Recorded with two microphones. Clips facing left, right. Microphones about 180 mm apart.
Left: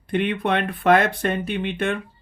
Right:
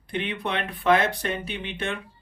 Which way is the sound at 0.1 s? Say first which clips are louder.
Left 7 dB; 55° left (ahead or behind).